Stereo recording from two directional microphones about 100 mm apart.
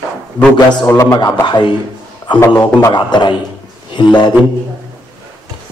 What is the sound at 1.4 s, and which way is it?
A man's voice, 50° left (ahead or behind).